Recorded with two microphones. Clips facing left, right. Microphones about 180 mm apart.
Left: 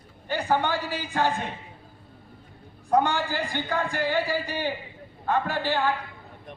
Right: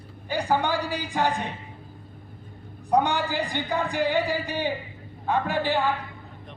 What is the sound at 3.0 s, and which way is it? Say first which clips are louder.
A man's voice: right 1 dB; 15° right (ahead or behind).